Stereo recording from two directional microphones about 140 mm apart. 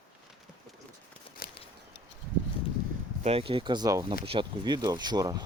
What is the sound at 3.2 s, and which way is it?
Speech, 40° right (ahead or behind).